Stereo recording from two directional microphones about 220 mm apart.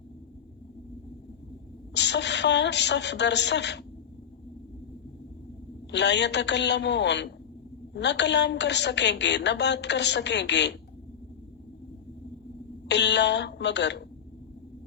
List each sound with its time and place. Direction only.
1.9 s a woman's voice: 50° left (ahead or behind)
5.9 s a woman's voice: 50° left (ahead or behind)
12.9 s a woman's voice: 50° left (ahead or behind)